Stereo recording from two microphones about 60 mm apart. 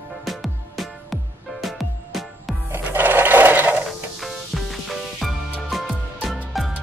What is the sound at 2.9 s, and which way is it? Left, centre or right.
Sewing machine, right.